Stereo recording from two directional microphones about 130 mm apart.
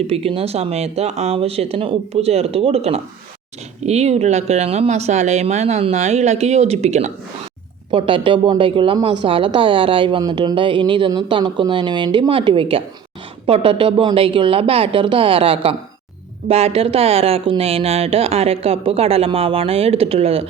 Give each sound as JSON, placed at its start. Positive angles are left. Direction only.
{"t": 0.1, "sound": "speech", "side_deg": -50}
{"t": 7.9, "sound": "a woman's voice", "side_deg": -40}